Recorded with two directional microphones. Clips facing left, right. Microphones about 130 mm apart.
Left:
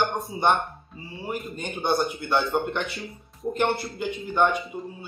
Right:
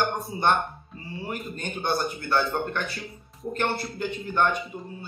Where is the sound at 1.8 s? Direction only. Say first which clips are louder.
Left 3 dB; 15° left (ahead or behind).